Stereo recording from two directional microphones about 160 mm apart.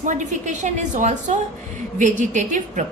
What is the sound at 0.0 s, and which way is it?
A woman's voice, 50° right (ahead or behind).